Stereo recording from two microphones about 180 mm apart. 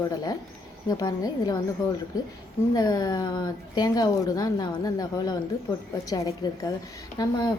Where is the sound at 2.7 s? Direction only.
20° left (ahead or behind).